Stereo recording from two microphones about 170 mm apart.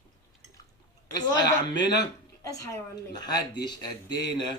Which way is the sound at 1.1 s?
25° left (ahead or behind).